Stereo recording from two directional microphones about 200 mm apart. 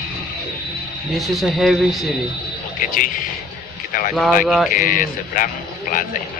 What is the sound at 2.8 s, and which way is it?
Speech, 40° left (ahead or behind).